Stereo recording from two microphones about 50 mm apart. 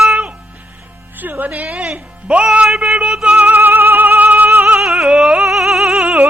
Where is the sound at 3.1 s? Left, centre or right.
Right.